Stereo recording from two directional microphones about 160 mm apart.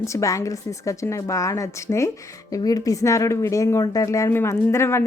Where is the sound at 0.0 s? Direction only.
20° left (ahead or behind).